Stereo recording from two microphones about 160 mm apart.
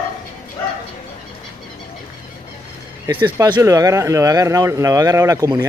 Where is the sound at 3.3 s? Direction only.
20° right (ahead or behind).